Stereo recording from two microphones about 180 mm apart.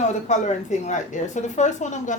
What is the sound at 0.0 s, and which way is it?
Speech, 40° left (ahead or behind).